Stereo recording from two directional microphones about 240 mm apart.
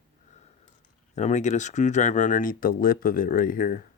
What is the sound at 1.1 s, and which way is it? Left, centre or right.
Speech, left.